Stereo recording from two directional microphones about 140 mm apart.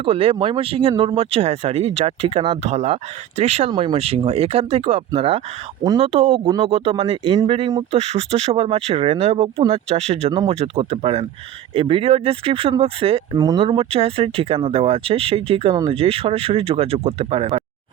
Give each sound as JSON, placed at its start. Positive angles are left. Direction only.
{"t": 0.0, "sound": "speech", "side_deg": -40}
{"t": 3.7, "sound": "speech", "side_deg": -30}
{"t": 3.9, "sound": "speech", "side_deg": -45}
{"t": 13.3, "sound": "speech", "side_deg": -25}
{"t": 13.6, "sound": "speech", "side_deg": -40}